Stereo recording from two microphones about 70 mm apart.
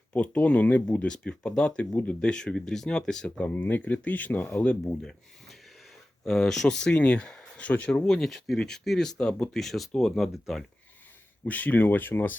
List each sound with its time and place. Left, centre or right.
0.1 s speech: centre
3.2 s speech: centre
6.2 s speech: centre
11.4 s speech: left